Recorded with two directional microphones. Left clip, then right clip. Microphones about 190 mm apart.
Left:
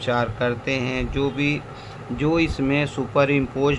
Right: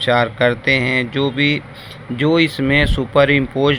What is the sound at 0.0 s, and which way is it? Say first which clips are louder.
Speech: right 8 dB; 20° right (ahead or behind).